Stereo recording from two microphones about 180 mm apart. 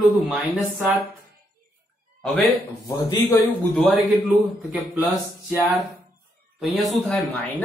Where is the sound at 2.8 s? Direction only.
20° left (ahead or behind).